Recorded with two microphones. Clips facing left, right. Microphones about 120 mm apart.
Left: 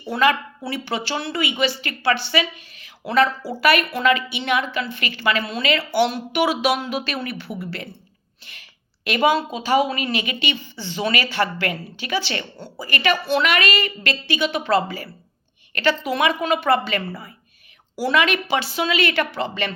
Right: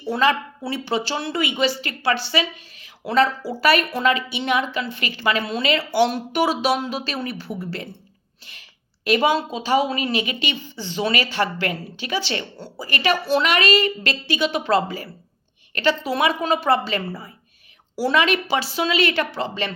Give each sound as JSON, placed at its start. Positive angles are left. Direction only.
{"t": 0.1, "sound": "a woman's voice", "side_deg": -35}
{"t": 9.0, "sound": "a woman's voice", "side_deg": -35}
{"t": 12.5, "sound": "a woman's voice", "side_deg": 15}
{"t": 12.8, "sound": "a woman's voice", "side_deg": -35}
{"t": 14.4, "sound": "a woman's voice", "side_deg": 50}
{"t": 14.7, "sound": "a woman's voice", "side_deg": -40}